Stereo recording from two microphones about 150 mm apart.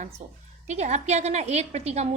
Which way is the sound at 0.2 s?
45° right (ahead or behind).